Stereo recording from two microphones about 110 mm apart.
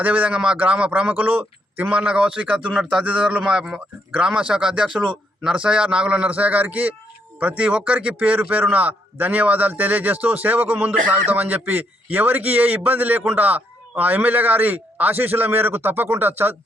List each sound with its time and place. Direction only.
0.0 s a man's voice: 15° right (ahead or behind)